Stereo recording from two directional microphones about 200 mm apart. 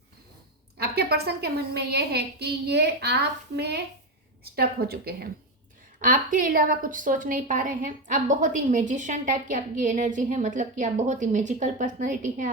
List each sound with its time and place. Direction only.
0.8 s a woman's voice: 55° right (ahead or behind)